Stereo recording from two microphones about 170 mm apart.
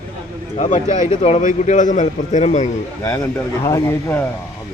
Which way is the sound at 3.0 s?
15° left (ahead or behind).